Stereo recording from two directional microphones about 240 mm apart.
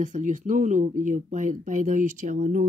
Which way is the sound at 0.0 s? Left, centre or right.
Right.